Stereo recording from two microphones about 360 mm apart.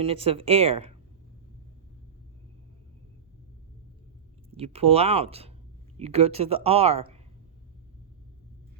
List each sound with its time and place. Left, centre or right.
0.0 s speech: centre
4.5 s speech: centre